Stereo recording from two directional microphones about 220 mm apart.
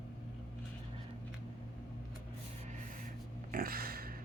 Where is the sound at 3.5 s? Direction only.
40° right (ahead or behind).